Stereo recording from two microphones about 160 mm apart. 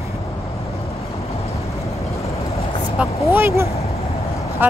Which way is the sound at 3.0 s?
10° right (ahead or behind).